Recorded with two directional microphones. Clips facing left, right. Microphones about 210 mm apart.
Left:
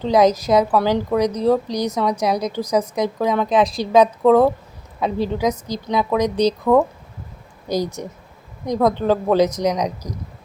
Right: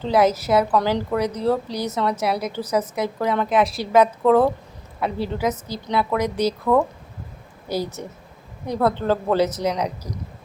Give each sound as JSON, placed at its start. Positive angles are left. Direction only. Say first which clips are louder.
{"t": 0.0, "sound": "a woman's voice", "louder": "left 3 dB", "side_deg": 15}